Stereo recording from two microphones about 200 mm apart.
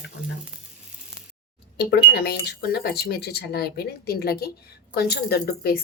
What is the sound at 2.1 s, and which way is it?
Speech, 55° left (ahead or behind).